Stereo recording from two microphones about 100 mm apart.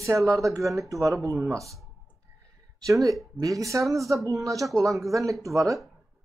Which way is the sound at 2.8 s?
35° right (ahead or behind).